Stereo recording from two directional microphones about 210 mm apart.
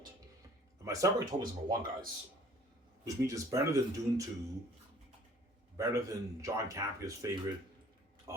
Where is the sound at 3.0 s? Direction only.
15° right (ahead or behind).